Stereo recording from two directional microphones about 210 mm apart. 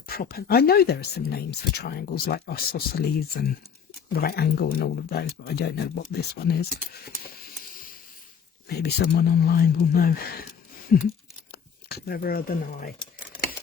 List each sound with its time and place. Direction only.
0.1 s speech: 45° left (ahead or behind)
7.3 s a sound: 45° left (ahead or behind)
8.6 s speech: 50° left (ahead or behind)